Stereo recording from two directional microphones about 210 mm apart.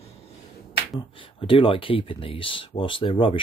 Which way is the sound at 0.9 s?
25° left (ahead or behind).